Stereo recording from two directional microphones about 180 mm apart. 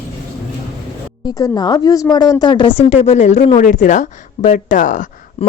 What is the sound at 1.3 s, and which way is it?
A woman's voice, 20° left (ahead or behind).